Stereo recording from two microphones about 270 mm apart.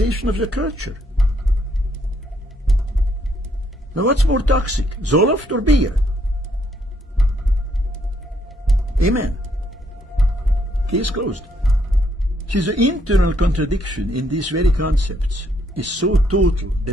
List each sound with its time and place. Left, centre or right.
0.0 s speech: right
3.9 s speech: right
8.9 s speech: right
9.7 s music: centre
10.9 s speech: right
11.4 s music: centre
12.4 s speech: right